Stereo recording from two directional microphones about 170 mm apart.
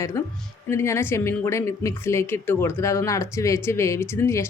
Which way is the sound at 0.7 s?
15° left (ahead or behind).